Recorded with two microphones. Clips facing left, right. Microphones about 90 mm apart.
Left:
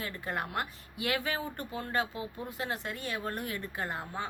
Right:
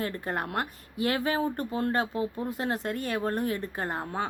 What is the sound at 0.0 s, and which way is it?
A woman's voice, 40° right (ahead or behind).